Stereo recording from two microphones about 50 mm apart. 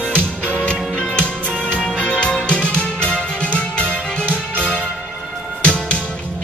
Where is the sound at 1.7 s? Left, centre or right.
Centre.